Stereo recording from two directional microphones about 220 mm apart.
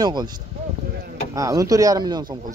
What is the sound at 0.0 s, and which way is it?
Speech, 20° right (ahead or behind).